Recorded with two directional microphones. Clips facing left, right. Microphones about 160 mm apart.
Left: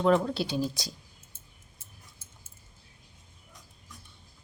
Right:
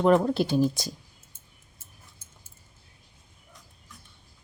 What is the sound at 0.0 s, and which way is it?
Speech, 50° right (ahead or behind).